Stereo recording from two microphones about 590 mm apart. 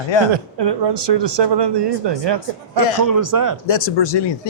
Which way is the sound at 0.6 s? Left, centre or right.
Right.